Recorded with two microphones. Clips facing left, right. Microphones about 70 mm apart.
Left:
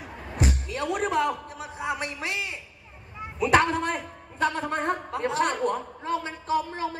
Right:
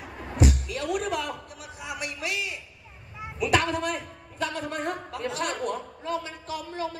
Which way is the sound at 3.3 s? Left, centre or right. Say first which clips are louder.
Left 3 dB; left.